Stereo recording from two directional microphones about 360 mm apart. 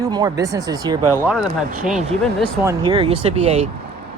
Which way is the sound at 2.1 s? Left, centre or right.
Centre.